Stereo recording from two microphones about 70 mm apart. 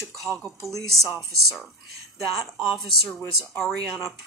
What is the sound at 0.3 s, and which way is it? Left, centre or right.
Speech, right.